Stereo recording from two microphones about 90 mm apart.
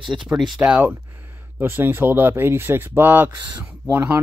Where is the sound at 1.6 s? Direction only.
25° right (ahead or behind).